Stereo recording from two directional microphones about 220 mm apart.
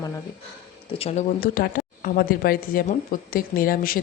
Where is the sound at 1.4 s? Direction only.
40° left (ahead or behind).